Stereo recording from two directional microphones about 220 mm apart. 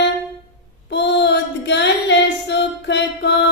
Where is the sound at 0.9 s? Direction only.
50° left (ahead or behind).